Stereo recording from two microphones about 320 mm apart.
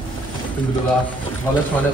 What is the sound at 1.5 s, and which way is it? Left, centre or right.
Speech, centre.